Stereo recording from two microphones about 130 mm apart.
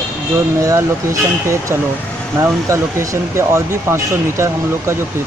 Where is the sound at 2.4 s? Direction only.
25° right (ahead or behind).